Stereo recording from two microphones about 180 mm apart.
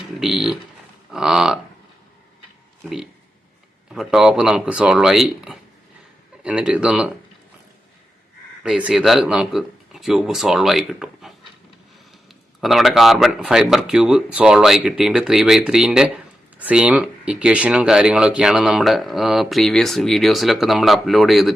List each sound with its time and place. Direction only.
0.2 s speech: centre (ahead or behind)
3.9 s speech: centre (ahead or behind)
8.6 s speech: 5° right (ahead or behind)
12.5 s speech: centre (ahead or behind)